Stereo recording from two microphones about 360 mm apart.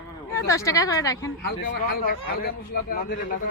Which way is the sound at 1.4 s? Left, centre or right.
Left.